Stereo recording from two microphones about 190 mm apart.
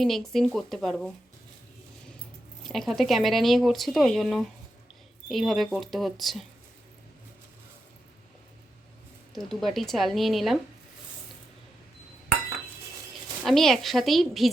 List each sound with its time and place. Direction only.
0.0 s speech: centre (ahead or behind)
2.6 s speech: centre (ahead or behind)
9.3 s speech: centre (ahead or behind)
13.4 s speech: centre (ahead or behind)